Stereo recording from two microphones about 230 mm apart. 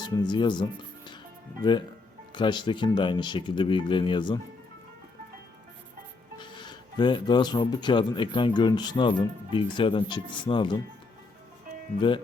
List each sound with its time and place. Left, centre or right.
0.2 s speech: centre
2.3 s speech: centre
6.4 s speech: centre
11.9 s speech: left